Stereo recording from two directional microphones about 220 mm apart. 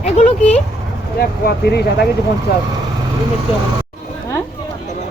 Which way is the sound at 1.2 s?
45° left (ahead or behind).